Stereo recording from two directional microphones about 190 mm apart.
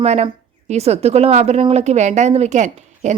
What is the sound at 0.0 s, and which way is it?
Speech, 35° right (ahead or behind).